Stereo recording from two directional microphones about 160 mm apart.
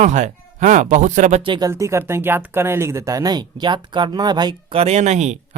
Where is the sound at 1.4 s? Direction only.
25° right (ahead or behind).